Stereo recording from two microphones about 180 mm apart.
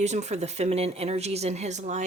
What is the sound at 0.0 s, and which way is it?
Speech, 40° right (ahead or behind).